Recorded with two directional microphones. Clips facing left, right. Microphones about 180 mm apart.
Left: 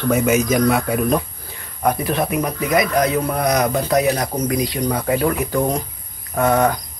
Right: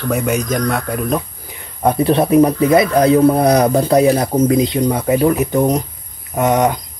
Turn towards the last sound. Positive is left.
turn(degrees=-20)  # may be behind; listen again after turning